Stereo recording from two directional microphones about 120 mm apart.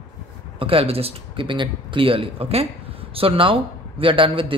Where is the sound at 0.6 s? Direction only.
50° right (ahead or behind).